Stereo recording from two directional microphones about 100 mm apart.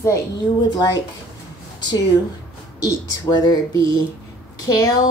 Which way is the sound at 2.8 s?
45° left (ahead or behind).